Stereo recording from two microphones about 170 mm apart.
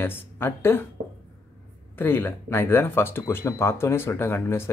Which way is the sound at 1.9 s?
10° left (ahead or behind).